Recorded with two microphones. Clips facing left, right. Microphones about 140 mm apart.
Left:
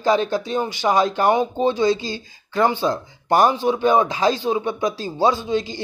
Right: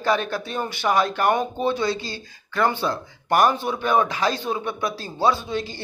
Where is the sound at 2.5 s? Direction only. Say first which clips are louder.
Left 3 dB; 20° left (ahead or behind).